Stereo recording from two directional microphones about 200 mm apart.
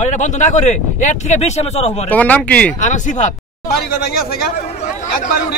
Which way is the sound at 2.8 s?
40° left (ahead or behind).